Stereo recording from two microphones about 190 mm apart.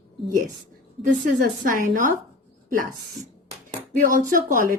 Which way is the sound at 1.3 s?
45° right (ahead or behind).